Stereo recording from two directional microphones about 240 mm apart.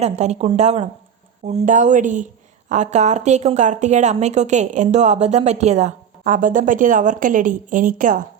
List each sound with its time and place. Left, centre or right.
0.0 s a woman's voice: right